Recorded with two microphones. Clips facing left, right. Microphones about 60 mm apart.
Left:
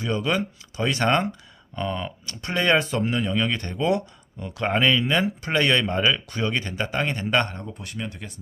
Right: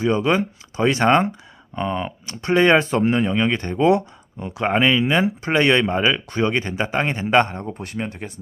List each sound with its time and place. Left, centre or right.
0.0 s speech: right
7.6 s speech: right